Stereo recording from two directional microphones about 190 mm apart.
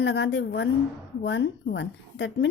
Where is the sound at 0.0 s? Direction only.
70° left (ahead or behind).